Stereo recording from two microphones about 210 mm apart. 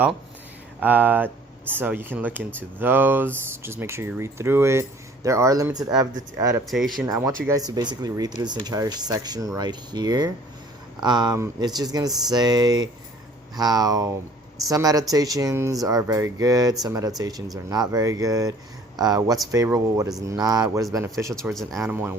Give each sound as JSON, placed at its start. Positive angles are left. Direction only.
{"t": 0.8, "sound": "speech", "side_deg": -10}
{"t": 6.7, "sound": "speech", "side_deg": 0}
{"t": 7.0, "sound": "speech", "side_deg": -15}